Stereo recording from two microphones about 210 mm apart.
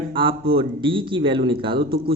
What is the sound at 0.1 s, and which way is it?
A man's voice, 25° right (ahead or behind).